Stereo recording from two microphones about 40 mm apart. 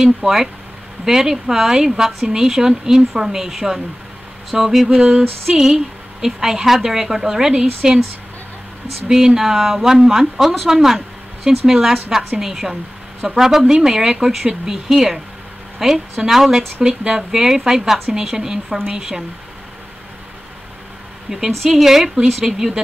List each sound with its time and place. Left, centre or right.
0.0 s speech: centre
9.1 s speech: centre
15.8 s speech: centre
21.3 s speech: right
21.6 s speech: centre